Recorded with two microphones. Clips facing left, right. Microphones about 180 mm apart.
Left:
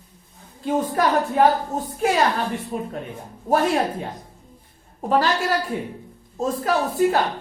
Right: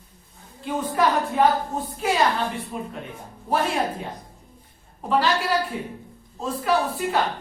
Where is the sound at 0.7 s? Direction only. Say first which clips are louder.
Left 2 dB; 45° left (ahead or behind).